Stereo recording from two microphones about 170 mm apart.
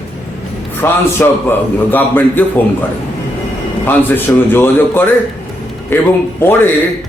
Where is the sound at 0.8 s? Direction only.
15° left (ahead or behind).